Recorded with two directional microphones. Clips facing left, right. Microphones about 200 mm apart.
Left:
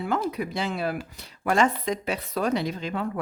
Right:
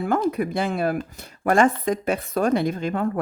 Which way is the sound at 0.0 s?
50° right (ahead or behind).